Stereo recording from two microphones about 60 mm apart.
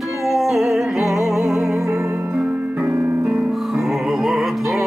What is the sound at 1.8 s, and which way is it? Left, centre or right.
Music, right.